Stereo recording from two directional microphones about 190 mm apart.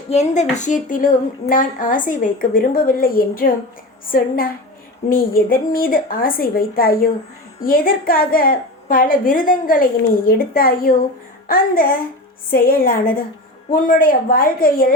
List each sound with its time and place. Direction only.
0.1 s a woman's voice: 35° left (ahead or behind)